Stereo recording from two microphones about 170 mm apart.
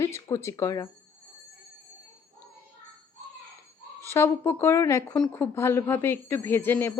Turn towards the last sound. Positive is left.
turn(degrees=10)  # may be behind; listen again after turning